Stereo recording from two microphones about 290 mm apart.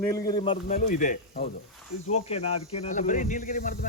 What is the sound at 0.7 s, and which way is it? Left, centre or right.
Speech, left.